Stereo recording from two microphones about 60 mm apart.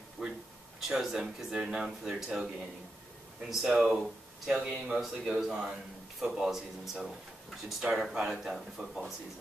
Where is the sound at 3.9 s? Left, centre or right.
Centre.